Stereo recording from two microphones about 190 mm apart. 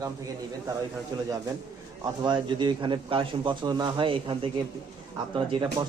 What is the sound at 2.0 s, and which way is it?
A man's voice, 25° right (ahead or behind).